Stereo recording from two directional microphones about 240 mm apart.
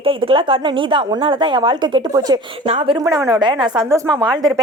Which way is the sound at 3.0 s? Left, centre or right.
Centre.